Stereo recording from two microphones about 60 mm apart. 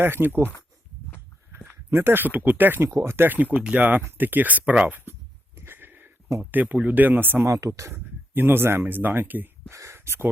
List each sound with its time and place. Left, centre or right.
0.0 s speech: right
1.5 s speech: right
3.6 s speech: right
5.5 s a sound: right
6.4 s speech: right
7.4 s speech: right
7.9 s speech: right
9.6 s speech: right